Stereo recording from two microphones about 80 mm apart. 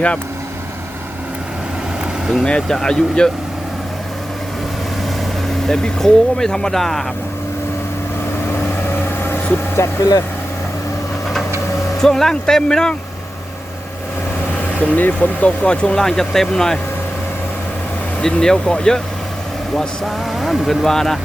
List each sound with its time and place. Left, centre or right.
2.4 s speech: centre
5.6 s speech: centre
9.0 s vehicle: left
11.9 s speech: centre
14.8 s speech: left
18.2 s speech: centre